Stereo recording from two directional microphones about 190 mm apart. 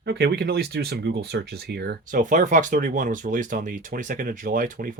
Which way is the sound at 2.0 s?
45° right (ahead or behind).